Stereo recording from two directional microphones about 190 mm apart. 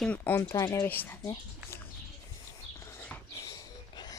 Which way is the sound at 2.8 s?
15° left (ahead or behind).